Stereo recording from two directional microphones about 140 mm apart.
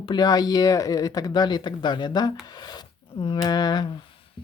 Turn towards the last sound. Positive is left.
turn(degrees=30)  # may be behind; listen again after turning